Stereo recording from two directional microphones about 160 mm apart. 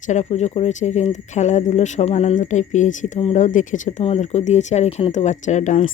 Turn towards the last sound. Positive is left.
turn(degrees=50)  # may be behind; listen again after turning